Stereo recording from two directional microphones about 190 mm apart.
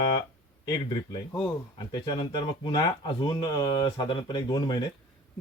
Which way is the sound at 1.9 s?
25° left (ahead or behind).